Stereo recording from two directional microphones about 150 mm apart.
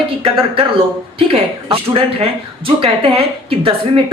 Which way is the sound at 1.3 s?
40° right (ahead or behind).